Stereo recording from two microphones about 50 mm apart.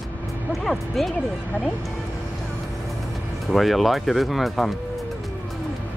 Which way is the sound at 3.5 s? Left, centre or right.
Centre.